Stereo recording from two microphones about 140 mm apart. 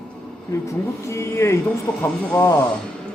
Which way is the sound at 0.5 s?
20° left (ahead or behind).